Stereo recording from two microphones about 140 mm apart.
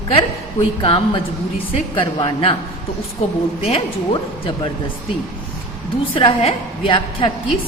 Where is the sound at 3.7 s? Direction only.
40° left (ahead or behind).